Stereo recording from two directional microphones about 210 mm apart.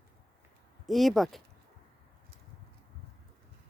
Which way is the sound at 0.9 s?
Centre (ahead or behind).